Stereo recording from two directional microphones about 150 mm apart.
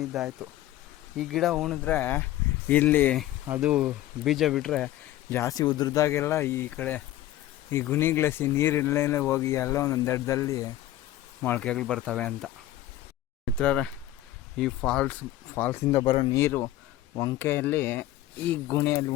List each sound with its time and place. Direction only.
0.1 s speech: centre (ahead or behind)
1.9 s speech: 15° left (ahead or behind)
3.6 s speech: 5° right (ahead or behind)
5.3 s speech: 20° left (ahead or behind)
11.4 s speech: 10° left (ahead or behind)
16.0 s speech: 35° left (ahead or behind)
16.3 s speech: 15° left (ahead or behind)